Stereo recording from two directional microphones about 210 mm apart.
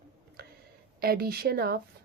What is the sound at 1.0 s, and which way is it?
Speech, 45° right (ahead or behind).